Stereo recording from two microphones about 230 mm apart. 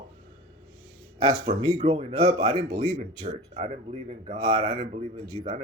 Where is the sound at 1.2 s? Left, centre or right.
Right.